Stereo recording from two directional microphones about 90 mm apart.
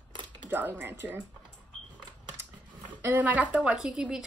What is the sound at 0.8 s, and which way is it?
Speech, 25° right (ahead or behind).